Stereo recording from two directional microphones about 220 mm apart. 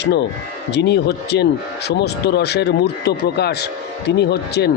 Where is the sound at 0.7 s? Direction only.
50° left (ahead or behind).